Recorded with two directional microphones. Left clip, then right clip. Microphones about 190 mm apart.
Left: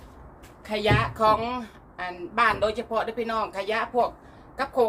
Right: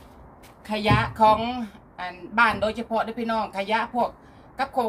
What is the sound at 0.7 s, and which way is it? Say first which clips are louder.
A woman's voice: right 1 dB; 10° right (ahead or behind).